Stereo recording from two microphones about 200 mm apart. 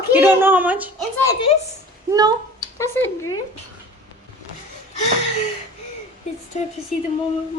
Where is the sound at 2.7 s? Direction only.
15° left (ahead or behind).